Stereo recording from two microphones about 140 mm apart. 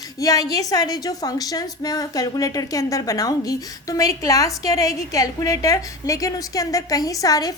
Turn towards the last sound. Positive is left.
turn(degrees=25)  # may be behind; listen again after turning